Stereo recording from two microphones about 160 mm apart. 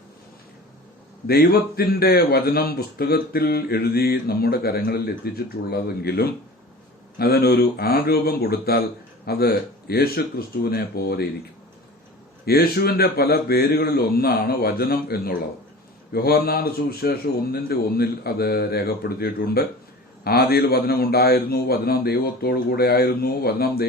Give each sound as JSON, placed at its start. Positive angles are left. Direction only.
{"t": 1.3, "sound": "speech", "side_deg": 75}
{"t": 12.5, "sound": "speech", "side_deg": 75}